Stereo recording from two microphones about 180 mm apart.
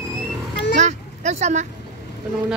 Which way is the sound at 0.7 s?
40° right (ahead or behind).